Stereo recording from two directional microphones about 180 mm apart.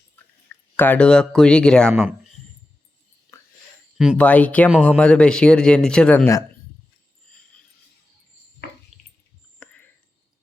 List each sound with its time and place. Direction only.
0.4 s speech: 10° left (ahead or behind)
3.9 s speech: 5° right (ahead or behind)
4.2 s speech: 5° left (ahead or behind)
8.9 s a sound: centre (ahead or behind)
9.6 s whispering: 5° left (ahead or behind)